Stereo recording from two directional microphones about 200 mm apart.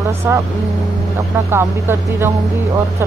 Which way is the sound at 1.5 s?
10° right (ahead or behind).